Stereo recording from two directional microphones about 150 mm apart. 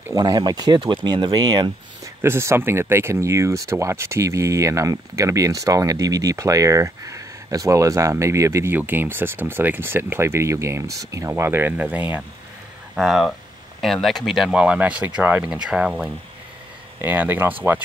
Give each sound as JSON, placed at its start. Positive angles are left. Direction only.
{"t": 0.0, "sound": "speech", "side_deg": -25}
{"t": 2.2, "sound": "speech", "side_deg": -15}